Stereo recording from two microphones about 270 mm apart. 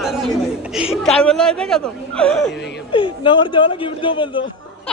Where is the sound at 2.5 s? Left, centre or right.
Left.